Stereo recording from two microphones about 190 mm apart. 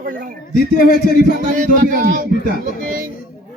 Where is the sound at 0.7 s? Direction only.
50° left (ahead or behind).